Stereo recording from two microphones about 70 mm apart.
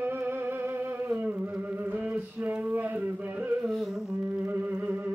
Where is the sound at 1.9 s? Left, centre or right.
Right.